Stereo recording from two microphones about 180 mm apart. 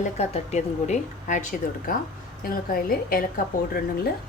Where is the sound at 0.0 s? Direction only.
35° left (ahead or behind); by 3.4 s 55° left (ahead or behind).